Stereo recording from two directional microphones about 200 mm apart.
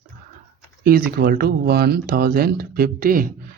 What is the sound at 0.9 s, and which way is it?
Speech, 50° right (ahead or behind).